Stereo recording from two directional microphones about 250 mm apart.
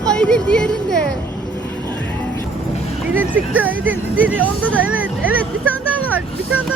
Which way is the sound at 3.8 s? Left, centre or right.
Right.